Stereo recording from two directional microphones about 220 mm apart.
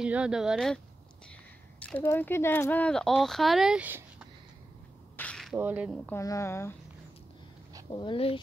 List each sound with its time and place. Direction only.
0.0 s speech: 5° right (ahead or behind)
1.8 s speech: 5° left (ahead or behind)
5.1 s a sound: 5° left (ahead or behind)
6.0 s a woman's voice: 15° left (ahead or behind)
7.9 s speech: 20° left (ahead or behind)